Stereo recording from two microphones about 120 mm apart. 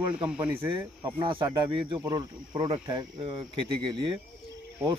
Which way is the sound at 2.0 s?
30° right (ahead or behind).